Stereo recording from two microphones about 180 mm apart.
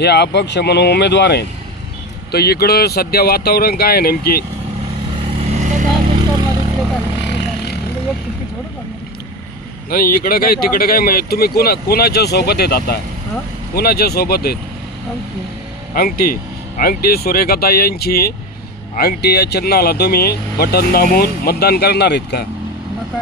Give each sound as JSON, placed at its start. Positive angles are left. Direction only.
{"t": 0.0, "sound": "speech", "side_deg": 65}
{"t": 2.3, "sound": "speech", "side_deg": 60}
{"t": 5.2, "sound": "vehicle", "side_deg": -35}
{"t": 7.2, "sound": "vehicle", "side_deg": 75}
{"t": 9.8, "sound": "speech", "side_deg": 55}
{"t": 15.9, "sound": "speech", "side_deg": 55}